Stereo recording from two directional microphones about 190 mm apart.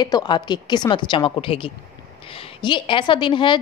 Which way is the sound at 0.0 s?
20° left (ahead or behind).